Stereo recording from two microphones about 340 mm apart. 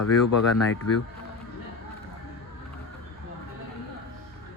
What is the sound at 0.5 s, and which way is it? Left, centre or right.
Speech, left.